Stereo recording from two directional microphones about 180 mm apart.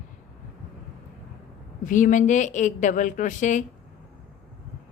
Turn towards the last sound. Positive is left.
turn(degrees=45)  # may be behind; listen again after turning